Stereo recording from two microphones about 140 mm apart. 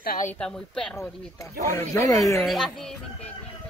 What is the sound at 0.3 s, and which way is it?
Speech, 5° left (ahead or behind).